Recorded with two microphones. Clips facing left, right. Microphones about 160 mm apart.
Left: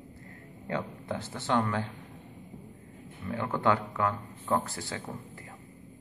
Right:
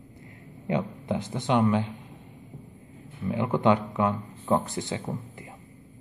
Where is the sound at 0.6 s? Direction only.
15° right (ahead or behind).